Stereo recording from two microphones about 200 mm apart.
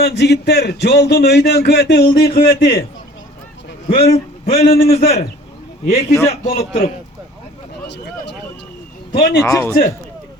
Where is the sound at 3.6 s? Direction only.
50° left (ahead or behind).